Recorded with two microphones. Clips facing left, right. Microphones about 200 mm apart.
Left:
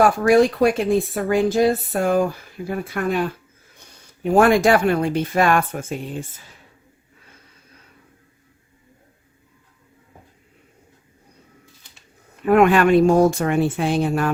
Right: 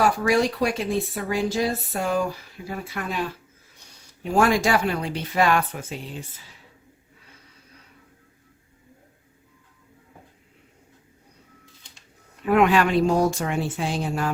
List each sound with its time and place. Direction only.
0.3 s speech: 55° left (ahead or behind)
12.5 s speech: 50° left (ahead or behind)